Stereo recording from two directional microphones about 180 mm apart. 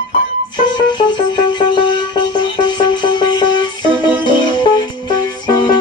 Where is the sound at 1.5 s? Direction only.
25° left (ahead or behind).